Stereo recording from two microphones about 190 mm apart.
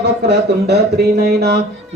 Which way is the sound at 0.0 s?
65° right (ahead or behind).